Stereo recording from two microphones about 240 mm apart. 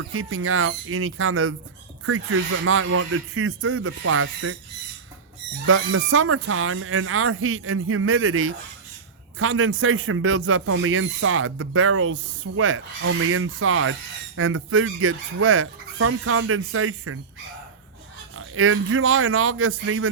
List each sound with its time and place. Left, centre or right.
0.2 s speech: right
5.6 s speech: right
18.3 s speech: right